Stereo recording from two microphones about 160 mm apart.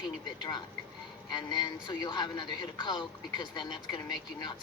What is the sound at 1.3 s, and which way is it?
Speech, 30° left (ahead or behind).